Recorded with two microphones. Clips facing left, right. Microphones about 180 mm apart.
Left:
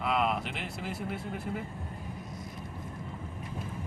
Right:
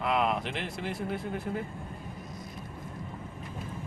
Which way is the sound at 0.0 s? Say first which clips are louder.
Right 1 dB; centre (ahead or behind).